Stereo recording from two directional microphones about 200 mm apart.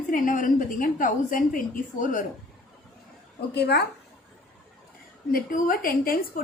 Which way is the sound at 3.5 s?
55° left (ahead or behind).